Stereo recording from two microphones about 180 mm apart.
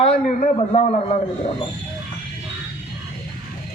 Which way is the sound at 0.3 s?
40° left (ahead or behind).